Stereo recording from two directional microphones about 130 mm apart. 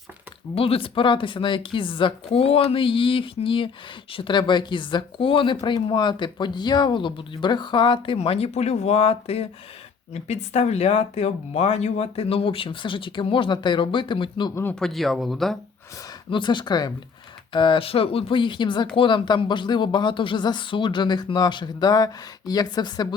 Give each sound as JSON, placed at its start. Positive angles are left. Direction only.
{"t": 0.5, "sound": "speech", "side_deg": 45}
{"t": 14.5, "sound": "speech", "side_deg": 15}
{"t": 14.8, "sound": "speech", "side_deg": 0}
{"t": 16.3, "sound": "speech", "side_deg": 35}